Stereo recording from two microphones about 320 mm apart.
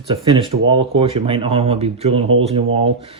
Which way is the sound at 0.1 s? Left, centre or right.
Centre.